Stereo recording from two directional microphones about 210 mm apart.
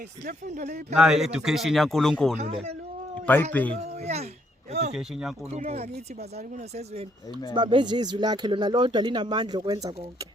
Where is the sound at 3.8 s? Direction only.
30° right (ahead or behind).